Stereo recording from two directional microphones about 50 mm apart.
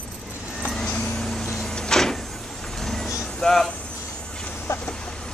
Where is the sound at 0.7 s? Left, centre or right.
Centre.